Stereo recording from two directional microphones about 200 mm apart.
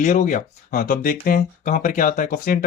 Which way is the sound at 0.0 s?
40° left (ahead or behind).